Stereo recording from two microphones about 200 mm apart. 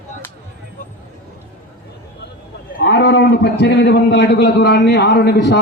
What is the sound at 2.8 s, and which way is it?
A man's voice, 60° left (ahead or behind).